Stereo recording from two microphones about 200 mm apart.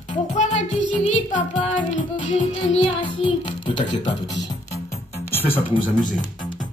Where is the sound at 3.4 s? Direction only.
20° left (ahead or behind).